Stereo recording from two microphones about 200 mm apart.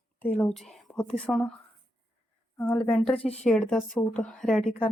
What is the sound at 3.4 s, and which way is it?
Speech, 5° left (ahead or behind).